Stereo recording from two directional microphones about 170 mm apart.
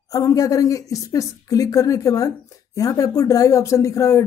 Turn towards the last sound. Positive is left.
turn(degrees=15)  # may be behind; listen again after turning